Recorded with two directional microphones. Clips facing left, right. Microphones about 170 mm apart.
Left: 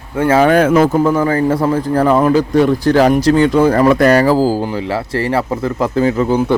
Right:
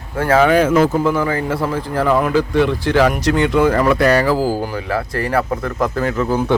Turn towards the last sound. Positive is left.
turn(degrees=30)  # may be behind; listen again after turning